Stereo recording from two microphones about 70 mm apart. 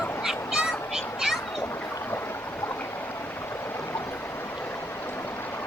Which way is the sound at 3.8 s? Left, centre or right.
Left.